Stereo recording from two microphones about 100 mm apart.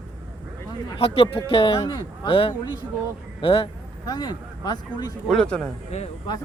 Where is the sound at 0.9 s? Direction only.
70° left (ahead or behind).